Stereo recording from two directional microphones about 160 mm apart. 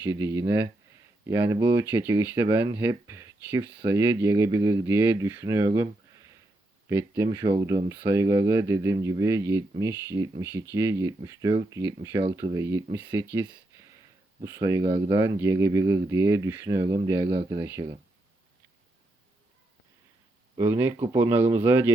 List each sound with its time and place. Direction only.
0.0 s speech: 15° right (ahead or behind)
13.3 s a sound: 10° right (ahead or behind)
14.4 s speech: 20° right (ahead or behind)
17.2 s speech: 35° right (ahead or behind)
17.6 s speech: 20° right (ahead or behind)
20.6 s speech: 15° right (ahead or behind)